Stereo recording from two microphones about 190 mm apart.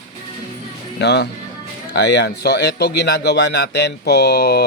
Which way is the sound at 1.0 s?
60° left (ahead or behind).